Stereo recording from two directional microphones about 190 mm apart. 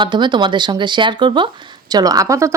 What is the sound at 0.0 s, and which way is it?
A woman's voice, 25° right (ahead or behind).